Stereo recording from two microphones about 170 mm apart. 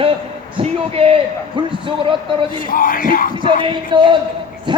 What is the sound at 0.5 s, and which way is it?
A man's voice, 35° right (ahead or behind).